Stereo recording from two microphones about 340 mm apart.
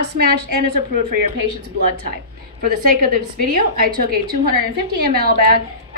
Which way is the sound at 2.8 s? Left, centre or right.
Right.